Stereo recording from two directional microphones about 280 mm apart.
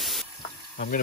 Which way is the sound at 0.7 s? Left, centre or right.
Left.